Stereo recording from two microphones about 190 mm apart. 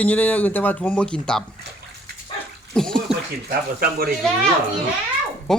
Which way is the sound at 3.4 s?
50° right (ahead or behind).